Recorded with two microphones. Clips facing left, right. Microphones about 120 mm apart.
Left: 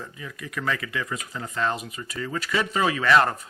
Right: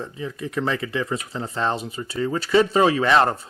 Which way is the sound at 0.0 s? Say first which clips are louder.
Right 8 dB; 30° right (ahead or behind).